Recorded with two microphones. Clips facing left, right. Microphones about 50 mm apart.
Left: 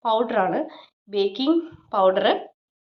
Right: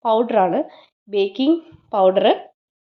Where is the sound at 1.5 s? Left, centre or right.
Right.